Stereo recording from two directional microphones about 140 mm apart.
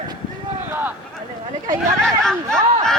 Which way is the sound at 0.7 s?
15° right (ahead or behind).